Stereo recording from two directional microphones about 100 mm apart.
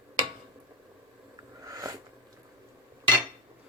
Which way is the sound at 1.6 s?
35° right (ahead or behind).